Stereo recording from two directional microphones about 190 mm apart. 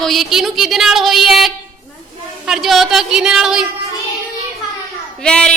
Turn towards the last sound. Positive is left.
turn(degrees=5)  # may be behind; listen again after turning